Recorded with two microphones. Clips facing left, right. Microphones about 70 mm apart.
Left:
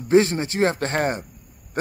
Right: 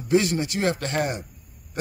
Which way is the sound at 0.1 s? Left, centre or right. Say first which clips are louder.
Left 4 dB; left.